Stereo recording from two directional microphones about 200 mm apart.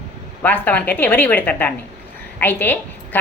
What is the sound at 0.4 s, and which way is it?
Speech, 10° left (ahead or behind).